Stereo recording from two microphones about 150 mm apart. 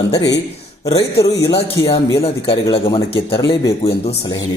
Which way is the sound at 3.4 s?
25° left (ahead or behind).